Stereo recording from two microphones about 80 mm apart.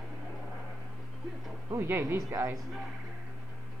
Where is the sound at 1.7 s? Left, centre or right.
Right.